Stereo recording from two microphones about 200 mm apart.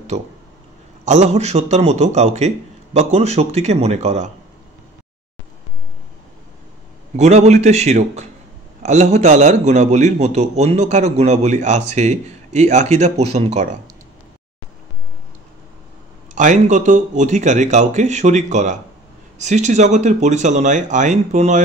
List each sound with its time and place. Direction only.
0.1 s a man's voice: 35° right (ahead or behind)
7.2 s a man's voice: 35° right (ahead or behind)
16.3 s a man's voice: 40° right (ahead or behind)